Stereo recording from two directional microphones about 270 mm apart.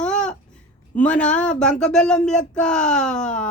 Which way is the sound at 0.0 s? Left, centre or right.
Centre.